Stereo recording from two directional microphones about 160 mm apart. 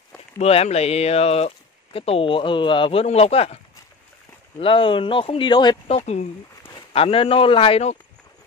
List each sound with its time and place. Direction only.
0.4 s speech: 40° left (ahead or behind)
4.6 s speech: 35° left (ahead or behind)
5.9 s speech: 45° left (ahead or behind)